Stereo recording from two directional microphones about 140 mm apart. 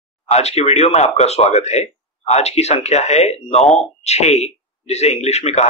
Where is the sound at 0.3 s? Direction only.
50° left (ahead or behind).